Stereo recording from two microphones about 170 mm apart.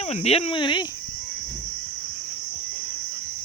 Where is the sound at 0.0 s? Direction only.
40° left (ahead or behind).